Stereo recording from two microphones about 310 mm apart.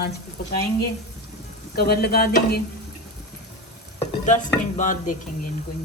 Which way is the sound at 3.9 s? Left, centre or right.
Left.